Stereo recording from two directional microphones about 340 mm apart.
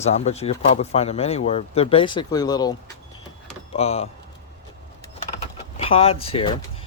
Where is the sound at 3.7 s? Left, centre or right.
Centre.